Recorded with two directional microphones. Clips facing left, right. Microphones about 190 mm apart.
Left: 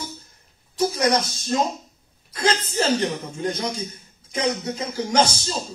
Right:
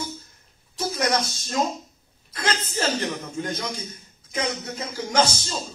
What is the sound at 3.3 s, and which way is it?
Speech, 25° left (ahead or behind).